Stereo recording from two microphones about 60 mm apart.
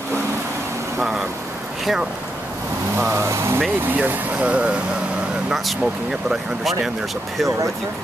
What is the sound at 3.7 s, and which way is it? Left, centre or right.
Speech, right.